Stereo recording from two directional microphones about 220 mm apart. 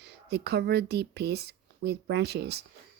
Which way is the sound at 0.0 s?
50° right (ahead or behind).